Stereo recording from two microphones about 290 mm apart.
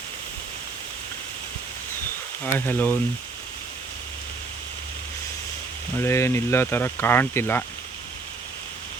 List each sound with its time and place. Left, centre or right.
2.4 s speech: centre
6.0 s speech: centre